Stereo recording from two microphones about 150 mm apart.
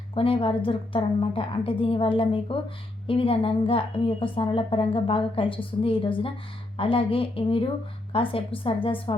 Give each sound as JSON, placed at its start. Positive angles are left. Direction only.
{"t": 0.1, "sound": "a woman's voice", "side_deg": 40}